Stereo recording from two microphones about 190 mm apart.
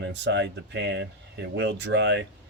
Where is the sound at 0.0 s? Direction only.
70° right (ahead or behind).